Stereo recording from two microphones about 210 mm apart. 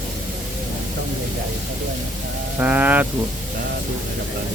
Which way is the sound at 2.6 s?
5° right (ahead or behind).